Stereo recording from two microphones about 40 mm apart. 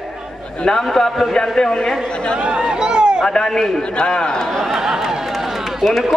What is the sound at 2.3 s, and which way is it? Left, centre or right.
Speech, right.